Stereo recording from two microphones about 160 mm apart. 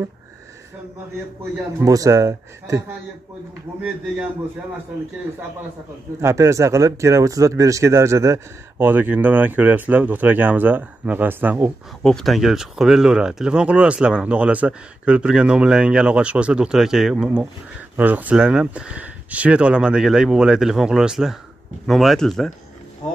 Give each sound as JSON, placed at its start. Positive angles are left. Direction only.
{"t": 1.8, "sound": "speech", "side_deg": -20}
{"t": 6.2, "sound": "speech", "side_deg": -20}
{"t": 12.0, "sound": "speech", "side_deg": 5}